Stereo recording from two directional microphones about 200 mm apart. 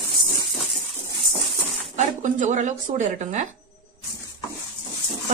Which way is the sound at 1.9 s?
35° right (ahead or behind).